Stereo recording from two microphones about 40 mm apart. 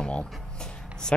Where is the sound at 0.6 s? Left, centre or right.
Centre.